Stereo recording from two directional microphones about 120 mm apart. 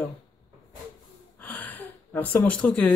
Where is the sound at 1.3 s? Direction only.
15° left (ahead or behind).